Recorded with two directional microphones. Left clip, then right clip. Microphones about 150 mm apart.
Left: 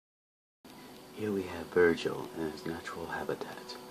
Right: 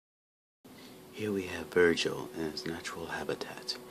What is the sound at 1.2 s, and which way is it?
Speech, 30° right (ahead or behind).